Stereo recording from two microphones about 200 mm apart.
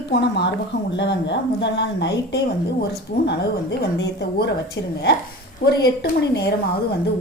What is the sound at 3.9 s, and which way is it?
Speech, 60° left (ahead or behind).